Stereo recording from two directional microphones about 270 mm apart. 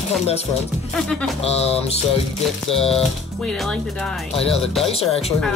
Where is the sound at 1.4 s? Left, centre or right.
Left.